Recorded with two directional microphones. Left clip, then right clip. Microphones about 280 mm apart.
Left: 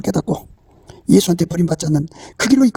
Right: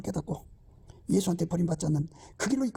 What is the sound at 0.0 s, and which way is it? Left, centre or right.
Speech, left.